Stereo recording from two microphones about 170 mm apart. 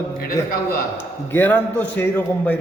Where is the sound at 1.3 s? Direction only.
10° left (ahead or behind).